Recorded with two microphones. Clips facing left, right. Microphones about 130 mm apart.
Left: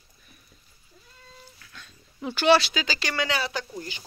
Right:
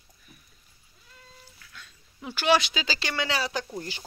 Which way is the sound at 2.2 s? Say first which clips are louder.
Left 4 dB; 10° right (ahead or behind).